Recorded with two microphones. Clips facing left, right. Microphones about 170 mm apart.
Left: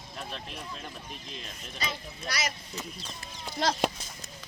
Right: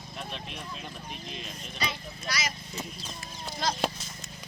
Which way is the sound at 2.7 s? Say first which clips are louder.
Right 1 dB; 20° right (ahead or behind).